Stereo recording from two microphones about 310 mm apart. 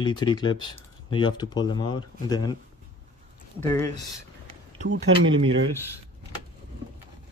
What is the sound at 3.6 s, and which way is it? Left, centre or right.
Speech, centre.